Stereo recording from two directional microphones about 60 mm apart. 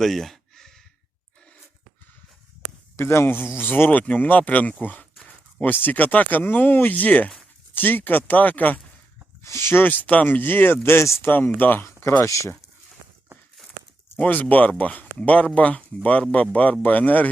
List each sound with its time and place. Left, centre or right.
0.0 s a sound: centre
2.9 s speech: left
9.4 s speech: left
10.8 s speech: left
11.3 s speech: left
11.9 s a sound: left
12.2 s speech: left
14.5 s speech: left